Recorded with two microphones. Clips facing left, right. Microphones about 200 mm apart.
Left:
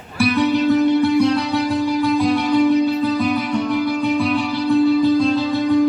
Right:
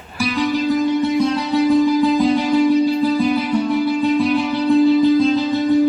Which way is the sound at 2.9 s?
30° right (ahead or behind).